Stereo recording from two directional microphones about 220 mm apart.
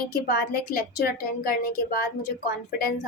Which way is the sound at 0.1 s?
45° left (ahead or behind).